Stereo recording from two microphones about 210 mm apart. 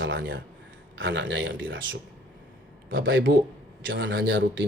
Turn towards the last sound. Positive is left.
turn(degrees=-65)  # may be behind; listen again after turning